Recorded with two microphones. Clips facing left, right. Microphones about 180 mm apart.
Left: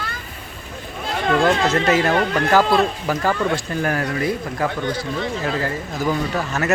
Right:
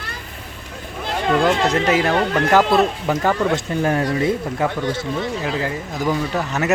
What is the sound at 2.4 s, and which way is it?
Speech, 20° right (ahead or behind).